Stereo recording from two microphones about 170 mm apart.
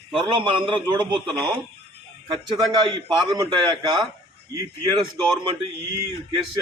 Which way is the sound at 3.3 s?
25° right (ahead or behind).